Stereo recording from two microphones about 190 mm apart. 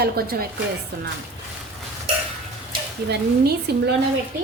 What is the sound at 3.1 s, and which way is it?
Speech, 60° right (ahead or behind).